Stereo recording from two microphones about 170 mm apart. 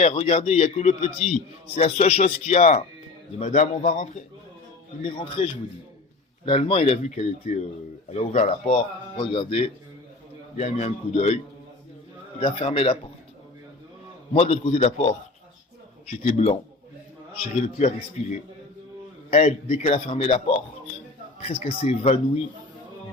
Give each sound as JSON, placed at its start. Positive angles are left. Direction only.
{"t": 0.0, "sound": "a man's voice", "side_deg": 35}
{"t": 5.0, "sound": "a man's voice", "side_deg": 35}
{"t": 12.4, "sound": "a man's voice", "side_deg": 30}
{"t": 14.3, "sound": "a man's voice", "side_deg": 35}
{"t": 19.3, "sound": "a man's voice", "side_deg": 40}